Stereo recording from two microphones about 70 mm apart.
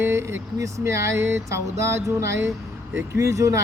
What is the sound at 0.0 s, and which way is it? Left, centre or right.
Speech, right.